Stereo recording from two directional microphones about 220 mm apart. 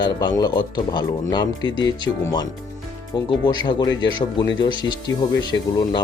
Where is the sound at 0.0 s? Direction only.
20° left (ahead or behind).